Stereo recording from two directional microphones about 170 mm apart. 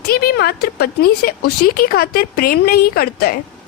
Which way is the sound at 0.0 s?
65° left (ahead or behind).